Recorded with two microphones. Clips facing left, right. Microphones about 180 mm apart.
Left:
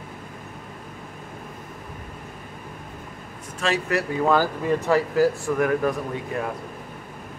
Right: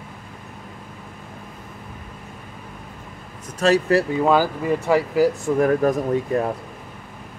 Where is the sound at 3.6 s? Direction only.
35° right (ahead or behind).